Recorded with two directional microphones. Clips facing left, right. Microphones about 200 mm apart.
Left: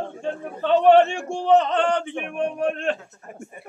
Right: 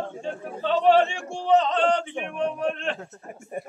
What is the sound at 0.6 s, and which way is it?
A man's voice, 55° left (ahead or behind).